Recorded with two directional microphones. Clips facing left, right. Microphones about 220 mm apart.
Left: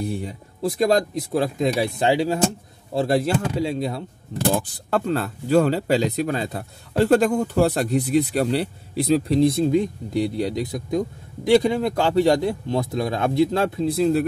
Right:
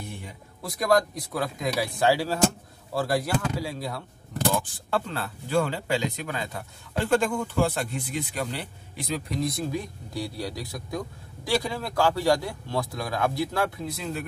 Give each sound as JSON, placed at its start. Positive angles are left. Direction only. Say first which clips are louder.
{"t": 0.0, "sound": "speech", "louder": "left 12 dB", "side_deg": 35}
{"t": 4.5, "sound": "speech", "louder": "left 5 dB", "side_deg": 35}